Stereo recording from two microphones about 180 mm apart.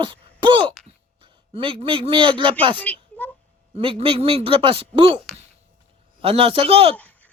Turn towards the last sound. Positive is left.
turn(degrees=-30)  # may be behind; listen again after turning